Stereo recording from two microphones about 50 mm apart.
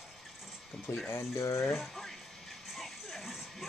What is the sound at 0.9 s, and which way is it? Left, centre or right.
Speech, left.